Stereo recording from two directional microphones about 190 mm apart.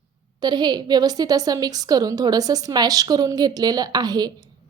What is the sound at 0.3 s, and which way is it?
A woman's voice, 20° right (ahead or behind).